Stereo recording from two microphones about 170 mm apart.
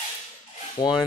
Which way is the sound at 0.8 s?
25° left (ahead or behind).